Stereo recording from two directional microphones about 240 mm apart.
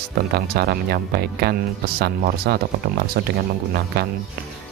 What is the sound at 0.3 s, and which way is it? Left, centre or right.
Speech, right.